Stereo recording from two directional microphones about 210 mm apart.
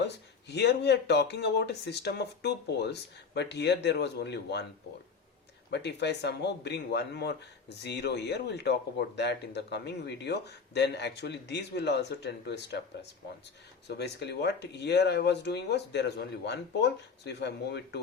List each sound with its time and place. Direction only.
0.0 s speech: 55° left (ahead or behind)
5.7 s speech: 55° left (ahead or behind)